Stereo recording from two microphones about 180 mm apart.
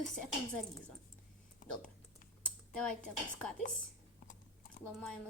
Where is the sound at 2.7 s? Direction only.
5° left (ahead or behind).